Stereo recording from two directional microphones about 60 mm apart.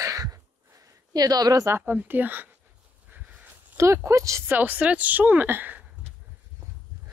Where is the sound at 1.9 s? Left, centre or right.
Right.